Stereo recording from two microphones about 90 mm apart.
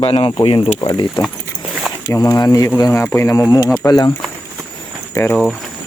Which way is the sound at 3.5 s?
45° left (ahead or behind).